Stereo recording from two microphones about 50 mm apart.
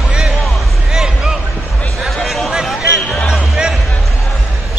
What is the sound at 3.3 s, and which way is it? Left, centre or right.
Music, centre.